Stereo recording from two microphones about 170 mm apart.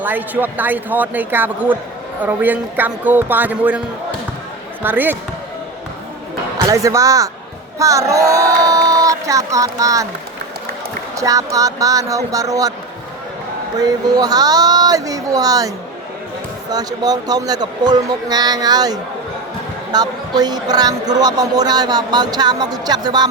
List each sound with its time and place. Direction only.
0.0 s a man's voice: 10° right (ahead or behind)
4.8 s a man's voice: 10° right (ahead or behind)
6.7 s speech: 20° right (ahead or behind)
11.2 s speech: 20° right (ahead or behind)
13.8 s speech: 25° right (ahead or behind)
16.7 s speech: 25° right (ahead or behind)